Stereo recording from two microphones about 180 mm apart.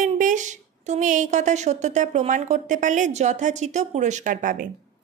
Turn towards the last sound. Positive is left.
turn(degrees=-45)  # may be behind; listen again after turning